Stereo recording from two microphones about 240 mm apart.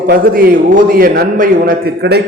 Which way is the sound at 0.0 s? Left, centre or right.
Right.